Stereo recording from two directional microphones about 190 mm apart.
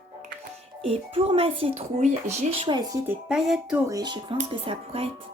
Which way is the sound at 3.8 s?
20° right (ahead or behind).